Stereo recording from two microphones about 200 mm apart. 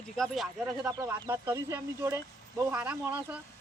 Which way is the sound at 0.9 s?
15° right (ahead or behind).